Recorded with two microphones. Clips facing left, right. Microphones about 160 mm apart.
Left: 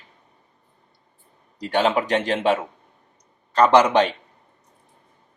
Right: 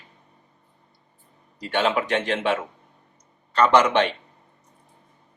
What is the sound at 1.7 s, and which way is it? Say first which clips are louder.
Speech: left 2 dB; 35° left (ahead or behind).